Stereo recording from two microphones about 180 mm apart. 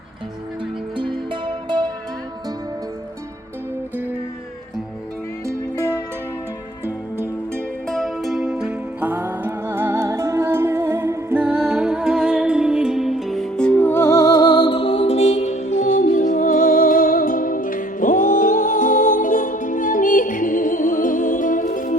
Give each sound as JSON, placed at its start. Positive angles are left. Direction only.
{"t": 0.9, "sound": "music", "side_deg": -25}
{"t": 6.8, "sound": "music", "side_deg": -15}
{"t": 7.9, "sound": "music", "side_deg": 0}